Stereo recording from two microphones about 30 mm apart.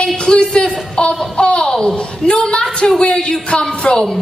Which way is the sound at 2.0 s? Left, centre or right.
Left.